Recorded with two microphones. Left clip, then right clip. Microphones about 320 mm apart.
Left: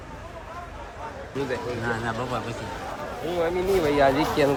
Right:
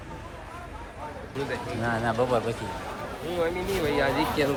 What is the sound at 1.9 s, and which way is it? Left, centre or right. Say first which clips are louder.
Speech: right 5 dB; centre.